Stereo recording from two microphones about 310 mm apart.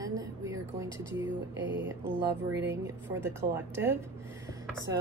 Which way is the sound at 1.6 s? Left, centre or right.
Right.